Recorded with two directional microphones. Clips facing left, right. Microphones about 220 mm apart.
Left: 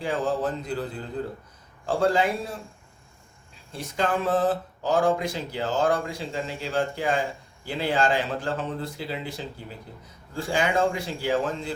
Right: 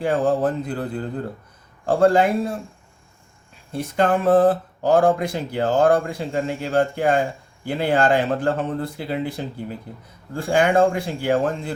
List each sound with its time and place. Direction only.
0.0 s speech: 55° right (ahead or behind)
1.9 s speech: 55° right (ahead or behind)
3.7 s a man's voice: 55° right (ahead or behind)